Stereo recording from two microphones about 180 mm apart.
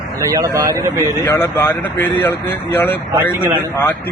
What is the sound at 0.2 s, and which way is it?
Speech, 20° right (ahead or behind).